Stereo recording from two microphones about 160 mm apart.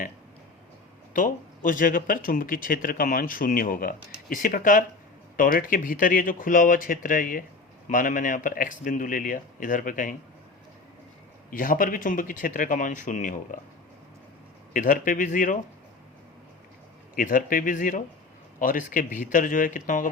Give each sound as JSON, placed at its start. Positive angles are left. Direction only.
{"t": 1.1, "sound": "speech", "side_deg": 55}
{"t": 11.5, "sound": "speech", "side_deg": 60}
{"t": 14.7, "sound": "speech", "side_deg": 55}
{"t": 17.2, "sound": "speech", "side_deg": 55}